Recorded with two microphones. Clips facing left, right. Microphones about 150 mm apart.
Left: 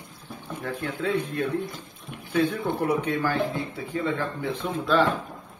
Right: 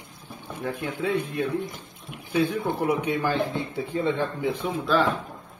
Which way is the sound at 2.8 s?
10° right (ahead or behind).